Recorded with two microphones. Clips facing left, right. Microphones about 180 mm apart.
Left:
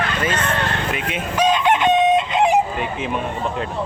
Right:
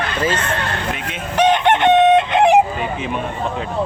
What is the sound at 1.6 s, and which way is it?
Chicken, 65° right (ahead or behind).